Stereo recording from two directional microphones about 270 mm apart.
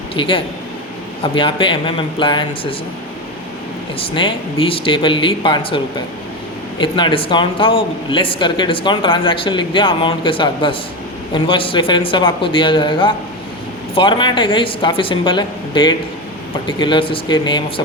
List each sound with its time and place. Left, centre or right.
0.1 s speech: centre
3.9 s speech: centre